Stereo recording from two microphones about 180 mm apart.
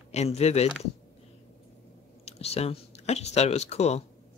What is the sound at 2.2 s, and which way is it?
Speech, 35° left (ahead or behind).